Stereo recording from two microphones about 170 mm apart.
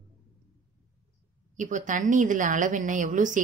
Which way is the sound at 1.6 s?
45° right (ahead or behind).